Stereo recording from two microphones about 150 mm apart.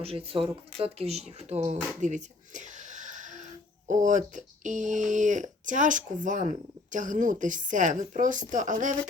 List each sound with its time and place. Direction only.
0.0 s a woman's voice: 40° right (ahead or behind); by 9.0 s 60° right (ahead or behind)